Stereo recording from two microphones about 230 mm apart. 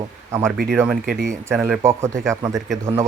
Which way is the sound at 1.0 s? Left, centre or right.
Right.